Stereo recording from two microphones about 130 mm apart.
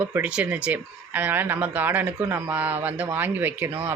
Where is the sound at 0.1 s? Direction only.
10° right (ahead or behind).